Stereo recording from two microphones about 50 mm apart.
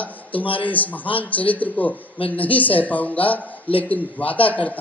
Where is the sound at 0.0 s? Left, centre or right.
Left.